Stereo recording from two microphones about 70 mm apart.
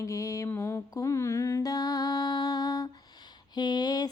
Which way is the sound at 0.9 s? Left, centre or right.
Left.